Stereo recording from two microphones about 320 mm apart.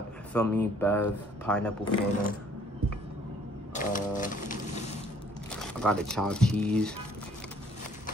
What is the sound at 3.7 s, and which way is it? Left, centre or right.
Pigeon, left.